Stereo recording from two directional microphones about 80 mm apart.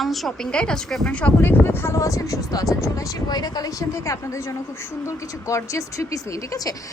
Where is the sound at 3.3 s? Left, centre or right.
Left.